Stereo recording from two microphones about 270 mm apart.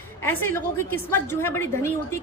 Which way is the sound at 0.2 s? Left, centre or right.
Centre.